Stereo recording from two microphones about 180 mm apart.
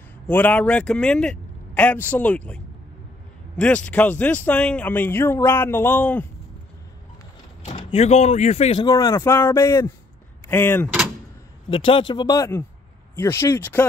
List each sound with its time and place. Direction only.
0.3 s speech: 10° left (ahead or behind)
7.6 s speech: 35° left (ahead or behind)
8.8 s speech: 20° left (ahead or behind)
11.7 s speech: 30° left (ahead or behind); by 13.8 s 10° left (ahead or behind)